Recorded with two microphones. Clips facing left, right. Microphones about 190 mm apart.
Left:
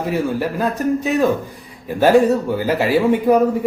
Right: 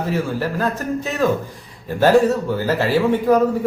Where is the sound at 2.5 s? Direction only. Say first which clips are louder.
Left 2 dB; 15° left (ahead or behind).